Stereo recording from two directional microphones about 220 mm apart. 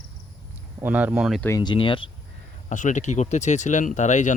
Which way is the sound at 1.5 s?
20° left (ahead or behind).